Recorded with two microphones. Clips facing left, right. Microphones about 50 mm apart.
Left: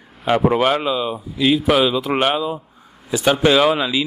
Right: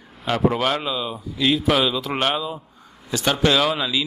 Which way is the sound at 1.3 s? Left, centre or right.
Centre.